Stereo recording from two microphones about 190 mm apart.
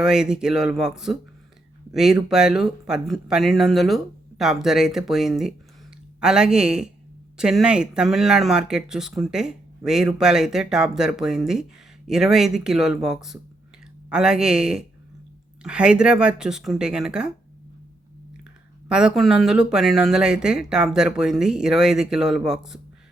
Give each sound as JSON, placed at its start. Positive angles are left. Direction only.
{"t": 0.0, "sound": "speech", "side_deg": -5}
{"t": 18.9, "sound": "speech", "side_deg": -5}